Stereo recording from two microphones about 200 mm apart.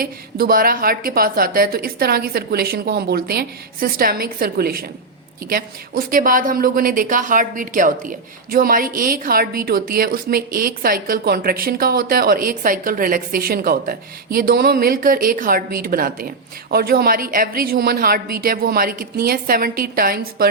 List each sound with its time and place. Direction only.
0.0 s a woman's voice: 45° right (ahead or behind)